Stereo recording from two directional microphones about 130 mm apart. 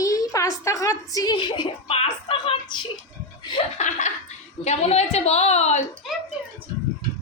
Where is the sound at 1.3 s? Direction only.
40° left (ahead or behind).